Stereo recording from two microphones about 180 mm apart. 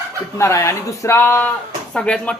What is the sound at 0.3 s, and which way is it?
A man's voice, 15° left (ahead or behind).